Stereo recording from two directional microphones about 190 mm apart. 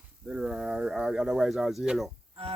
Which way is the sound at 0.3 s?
5° right (ahead or behind).